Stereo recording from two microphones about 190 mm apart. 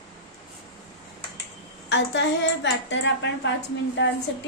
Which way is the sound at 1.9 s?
70° left (ahead or behind).